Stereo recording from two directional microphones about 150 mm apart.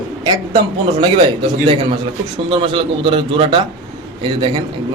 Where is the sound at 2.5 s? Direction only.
35° right (ahead or behind).